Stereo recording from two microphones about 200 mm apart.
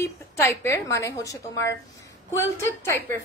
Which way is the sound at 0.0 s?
15° left (ahead or behind).